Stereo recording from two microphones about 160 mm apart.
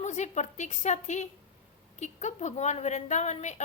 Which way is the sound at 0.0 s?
45° left (ahead or behind).